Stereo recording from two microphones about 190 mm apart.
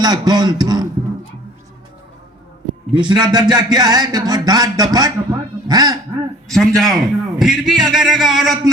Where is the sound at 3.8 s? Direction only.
20° right (ahead or behind).